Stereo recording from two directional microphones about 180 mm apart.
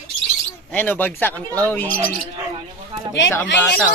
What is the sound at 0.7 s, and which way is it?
Speech, 10° left (ahead or behind).